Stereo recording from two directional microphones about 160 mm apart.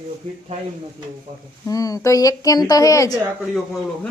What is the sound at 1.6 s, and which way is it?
Speech, 20° left (ahead or behind).